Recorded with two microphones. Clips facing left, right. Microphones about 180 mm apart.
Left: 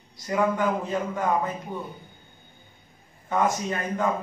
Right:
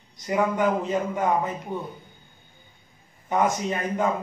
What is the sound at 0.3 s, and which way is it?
Speech, 15° right (ahead or behind).